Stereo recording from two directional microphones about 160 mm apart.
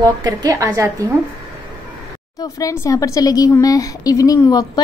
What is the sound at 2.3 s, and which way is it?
Speech, 20° left (ahead or behind).